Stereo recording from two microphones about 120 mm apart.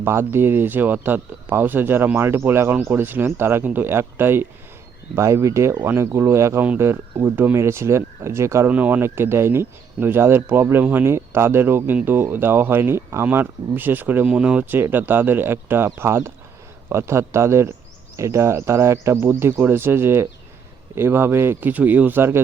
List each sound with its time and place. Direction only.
0.0 s speech: 20° right (ahead or behind)